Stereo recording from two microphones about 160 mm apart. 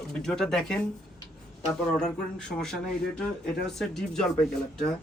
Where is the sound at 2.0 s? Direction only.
5° left (ahead or behind).